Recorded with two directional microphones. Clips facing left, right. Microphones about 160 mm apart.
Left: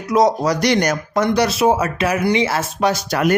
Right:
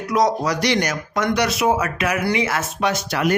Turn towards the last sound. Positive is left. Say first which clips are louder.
# left 3 dB
turn(degrees=45)  # may be behind; listen again after turning